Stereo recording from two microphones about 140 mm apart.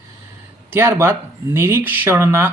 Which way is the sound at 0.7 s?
15° right (ahead or behind).